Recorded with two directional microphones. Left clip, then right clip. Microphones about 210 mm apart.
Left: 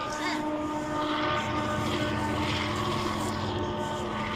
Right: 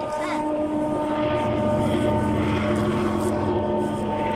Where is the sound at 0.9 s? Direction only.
50° right (ahead or behind).